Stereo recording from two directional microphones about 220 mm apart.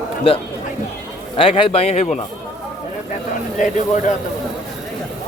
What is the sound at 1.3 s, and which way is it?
Speech, 25° left (ahead or behind).